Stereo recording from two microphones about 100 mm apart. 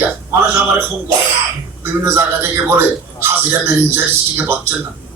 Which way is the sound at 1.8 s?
25° right (ahead or behind).